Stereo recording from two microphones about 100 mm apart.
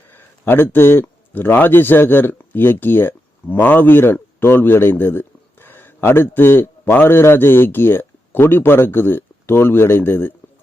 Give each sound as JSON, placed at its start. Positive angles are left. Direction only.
{"t": 0.1, "sound": "speech", "side_deg": 20}